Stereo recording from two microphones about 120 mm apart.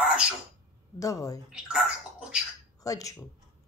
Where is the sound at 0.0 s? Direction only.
10° right (ahead or behind).